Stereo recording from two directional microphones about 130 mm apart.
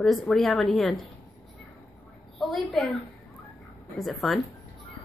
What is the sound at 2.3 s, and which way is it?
A woman's voice, centre (ahead or behind).